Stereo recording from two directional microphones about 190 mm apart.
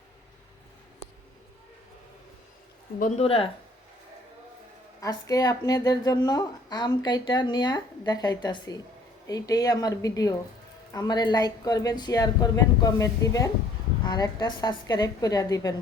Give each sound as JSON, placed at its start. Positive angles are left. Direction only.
{"t": 3.0, "sound": "a woman's voice", "side_deg": 30}
{"t": 4.9, "sound": "a woman's voice", "side_deg": 20}